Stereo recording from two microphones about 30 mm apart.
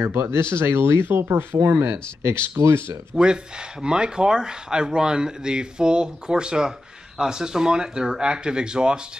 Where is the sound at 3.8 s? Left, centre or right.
Right.